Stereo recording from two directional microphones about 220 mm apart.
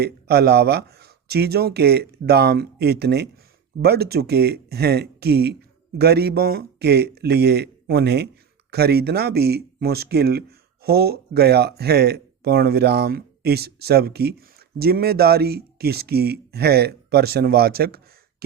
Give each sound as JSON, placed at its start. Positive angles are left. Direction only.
{"t": 0.0, "sound": "speech", "side_deg": -45}